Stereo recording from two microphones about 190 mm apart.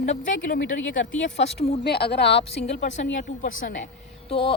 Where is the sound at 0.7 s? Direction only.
90° left.